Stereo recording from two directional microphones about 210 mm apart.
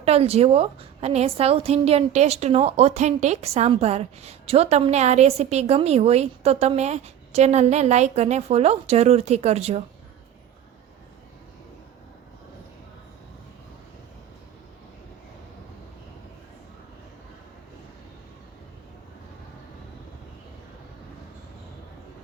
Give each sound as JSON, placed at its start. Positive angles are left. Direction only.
{"t": 0.0, "sound": "a woman's voice", "side_deg": -30}